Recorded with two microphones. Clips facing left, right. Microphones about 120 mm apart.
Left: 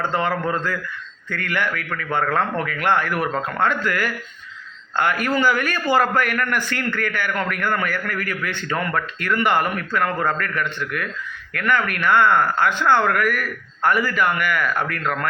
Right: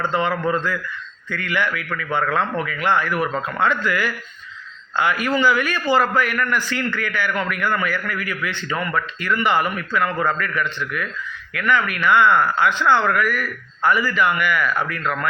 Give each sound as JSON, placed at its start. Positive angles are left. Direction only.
{"t": 0.0, "sound": "a man's voice", "side_deg": 45}